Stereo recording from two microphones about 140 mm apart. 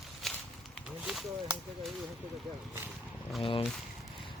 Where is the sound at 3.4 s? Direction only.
35° left (ahead or behind).